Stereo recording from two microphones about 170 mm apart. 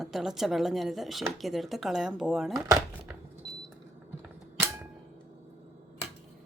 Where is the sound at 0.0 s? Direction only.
Centre (ahead or behind).